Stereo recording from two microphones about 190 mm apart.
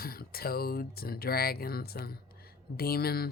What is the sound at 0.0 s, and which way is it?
Speech, 50° left (ahead or behind).